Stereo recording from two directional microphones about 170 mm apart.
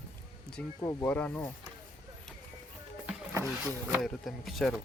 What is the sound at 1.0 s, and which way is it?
Speech, 10° left (ahead or behind).